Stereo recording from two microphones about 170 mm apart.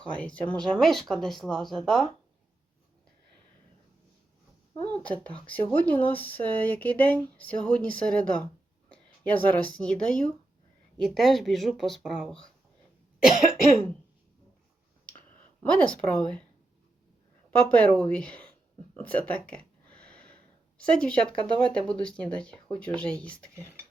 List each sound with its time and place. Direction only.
0.0 s speech: 10° left (ahead or behind)
5.0 s speech: 10° left (ahead or behind)
15.6 s speech: 5° left (ahead or behind)
17.9 s speech: 5° left (ahead or behind)
18.9 s a sound: 10° left (ahead or behind)
20.7 s speech: 5° left (ahead or behind)
23.6 s beatboxing: 15° right (ahead or behind)